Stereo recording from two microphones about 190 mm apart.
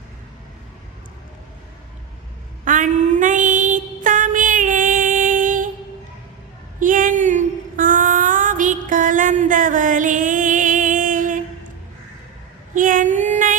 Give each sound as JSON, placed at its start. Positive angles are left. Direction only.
{"t": 2.6, "sound": "music", "side_deg": -40}
{"t": 6.7, "sound": "a sound", "side_deg": -45}
{"t": 12.7, "sound": "female singing", "side_deg": -45}